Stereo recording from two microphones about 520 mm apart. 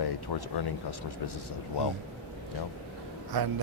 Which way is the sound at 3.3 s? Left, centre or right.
Right.